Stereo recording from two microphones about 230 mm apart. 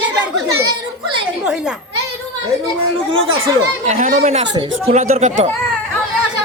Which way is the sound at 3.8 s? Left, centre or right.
Right.